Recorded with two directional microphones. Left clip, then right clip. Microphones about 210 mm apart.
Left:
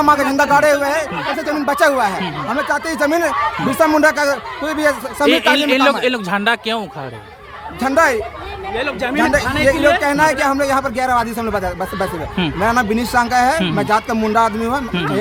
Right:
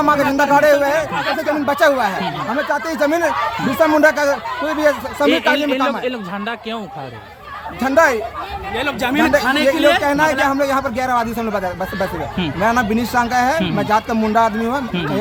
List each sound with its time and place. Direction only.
0.0 s a man's voice: 10° left (ahead or behind)
5.6 s a man's voice: 30° left (ahead or behind)
7.8 s a man's voice: 10° left (ahead or behind)
8.7 s speech: 55° right (ahead or behind)
10.0 s a man's voice: 15° left (ahead or behind)